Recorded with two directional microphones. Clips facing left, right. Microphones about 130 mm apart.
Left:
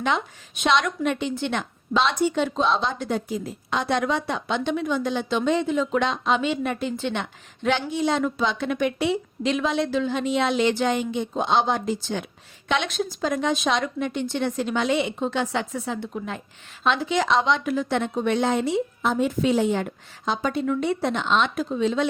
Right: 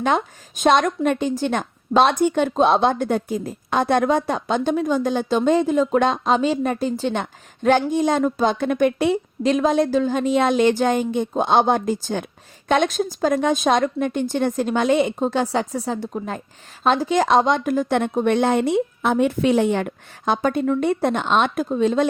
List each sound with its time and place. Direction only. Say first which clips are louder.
0.0 s speech: right 4 dB; 45° right (ahead or behind)